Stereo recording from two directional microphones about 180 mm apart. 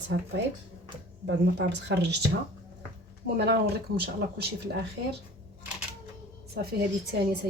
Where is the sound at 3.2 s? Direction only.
65° right (ahead or behind).